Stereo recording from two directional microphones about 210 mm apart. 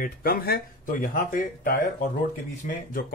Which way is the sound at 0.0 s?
45° left (ahead or behind).